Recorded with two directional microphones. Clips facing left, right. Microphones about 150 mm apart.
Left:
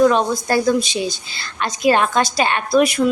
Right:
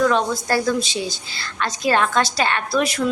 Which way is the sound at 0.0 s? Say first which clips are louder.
Left 4 dB; 20° left (ahead or behind).